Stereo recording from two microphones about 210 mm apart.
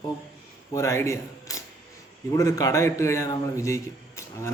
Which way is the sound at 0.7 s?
15° left (ahead or behind).